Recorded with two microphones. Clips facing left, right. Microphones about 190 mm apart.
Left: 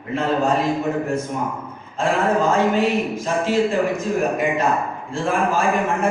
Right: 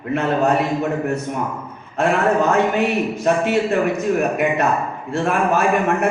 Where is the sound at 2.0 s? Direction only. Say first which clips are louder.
Right 2 dB; 65° right (ahead or behind).